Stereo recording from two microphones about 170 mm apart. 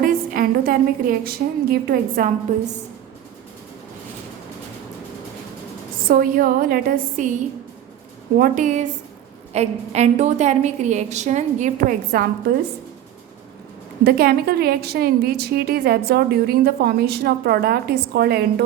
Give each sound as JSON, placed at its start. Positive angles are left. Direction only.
{"t": 0.0, "sound": "a woman's voice", "side_deg": -55}
{"t": 6.1, "sound": "a woman's voice", "side_deg": -55}
{"t": 8.4, "sound": "a woman's voice", "side_deg": -50}
{"t": 14.0, "sound": "a woman's voice", "side_deg": -65}